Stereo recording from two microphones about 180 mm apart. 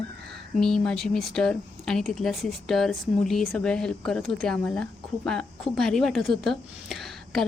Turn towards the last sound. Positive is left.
turn(degrees=0)  # may be behind; listen again after turning